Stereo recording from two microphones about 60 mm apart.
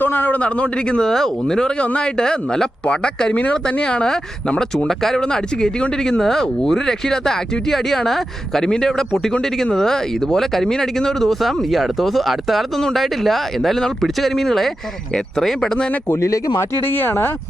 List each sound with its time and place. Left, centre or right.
0.0 s a man's voice: left
0.3 s speech: left
16.0 s speech: left
16.8 s speech: left